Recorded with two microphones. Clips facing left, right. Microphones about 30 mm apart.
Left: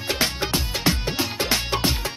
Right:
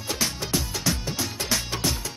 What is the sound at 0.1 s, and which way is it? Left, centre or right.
Music, left.